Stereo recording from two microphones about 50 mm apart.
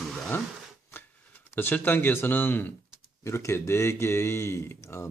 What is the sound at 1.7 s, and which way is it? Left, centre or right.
Speech, left.